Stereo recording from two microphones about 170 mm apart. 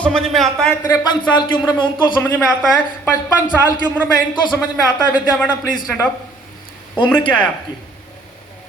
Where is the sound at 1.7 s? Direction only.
25° left (ahead or behind).